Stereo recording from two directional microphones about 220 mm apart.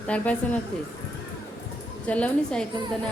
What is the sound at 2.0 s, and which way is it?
Speech, 5° left (ahead or behind).